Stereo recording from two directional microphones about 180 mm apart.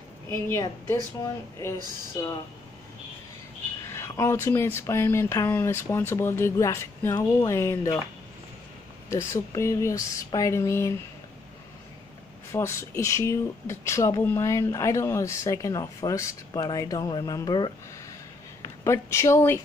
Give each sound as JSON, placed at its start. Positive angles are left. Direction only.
{"t": 0.5, "sound": "speech", "side_deg": 15}
{"t": 3.9, "sound": "speech", "side_deg": 15}
{"t": 9.1, "sound": "speech", "side_deg": 15}
{"t": 12.5, "sound": "speech", "side_deg": 15}